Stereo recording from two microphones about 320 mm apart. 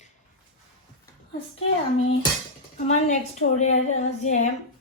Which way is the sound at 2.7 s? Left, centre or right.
Left.